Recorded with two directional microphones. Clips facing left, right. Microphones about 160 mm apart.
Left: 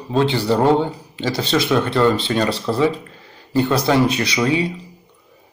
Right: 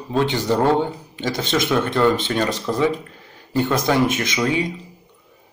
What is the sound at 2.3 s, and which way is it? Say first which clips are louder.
Speech: left 2 dB; 10° right (ahead or behind).